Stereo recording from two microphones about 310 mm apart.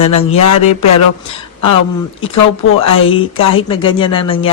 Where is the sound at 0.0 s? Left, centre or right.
Left.